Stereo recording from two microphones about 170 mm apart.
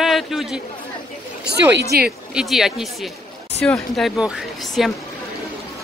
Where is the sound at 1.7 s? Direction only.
70° right (ahead or behind).